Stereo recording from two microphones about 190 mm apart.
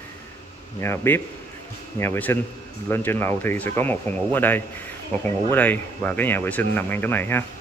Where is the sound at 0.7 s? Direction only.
10° left (ahead or behind).